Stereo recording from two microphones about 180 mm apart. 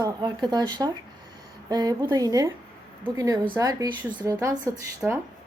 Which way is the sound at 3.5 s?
20° right (ahead or behind).